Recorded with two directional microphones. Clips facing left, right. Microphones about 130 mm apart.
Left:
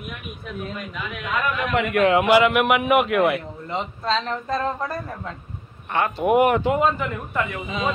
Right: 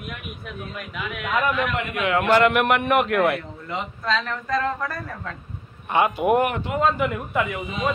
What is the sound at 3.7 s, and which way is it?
Speech, 30° left (ahead or behind).